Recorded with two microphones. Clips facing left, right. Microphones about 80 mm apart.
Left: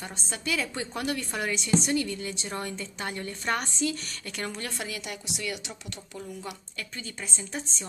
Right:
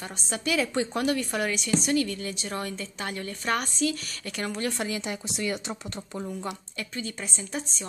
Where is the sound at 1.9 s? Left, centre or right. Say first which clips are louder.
Right 2 dB; centre.